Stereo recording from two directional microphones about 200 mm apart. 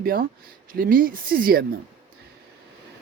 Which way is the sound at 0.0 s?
45° right (ahead or behind).